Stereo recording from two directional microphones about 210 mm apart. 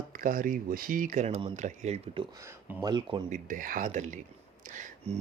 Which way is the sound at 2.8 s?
20° right (ahead or behind).